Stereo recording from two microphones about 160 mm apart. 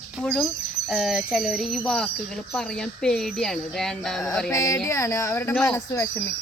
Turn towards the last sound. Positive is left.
turn(degrees=20)  # may be behind; listen again after turning